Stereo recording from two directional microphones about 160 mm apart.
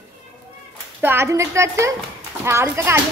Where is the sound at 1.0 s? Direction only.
15° right (ahead or behind).